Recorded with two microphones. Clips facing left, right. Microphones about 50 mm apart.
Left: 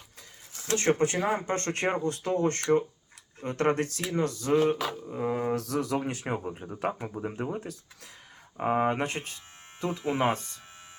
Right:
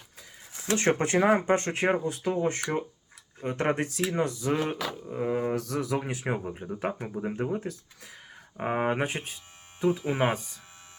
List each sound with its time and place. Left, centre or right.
0.5 s speech: right
1.5 s speech: centre
8.5 s speech: centre